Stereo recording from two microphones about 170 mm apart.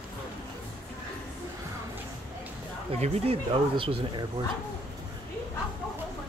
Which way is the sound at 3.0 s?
35° right (ahead or behind).